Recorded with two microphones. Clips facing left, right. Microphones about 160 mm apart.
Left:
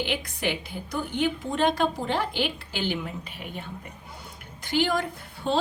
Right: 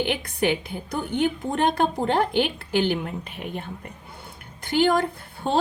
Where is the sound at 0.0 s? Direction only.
55° right (ahead or behind).